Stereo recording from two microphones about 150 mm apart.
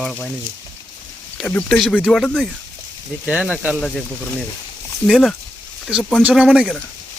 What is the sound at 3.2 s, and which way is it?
Speech, 10° right (ahead or behind).